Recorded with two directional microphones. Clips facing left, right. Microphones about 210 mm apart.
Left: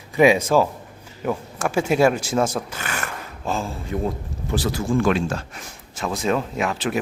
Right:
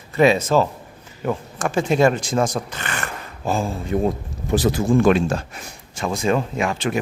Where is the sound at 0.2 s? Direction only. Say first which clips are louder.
Even; 10° left (ahead or behind).